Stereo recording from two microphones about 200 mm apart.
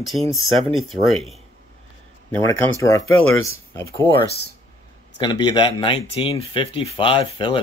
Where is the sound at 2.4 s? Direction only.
15° left (ahead or behind).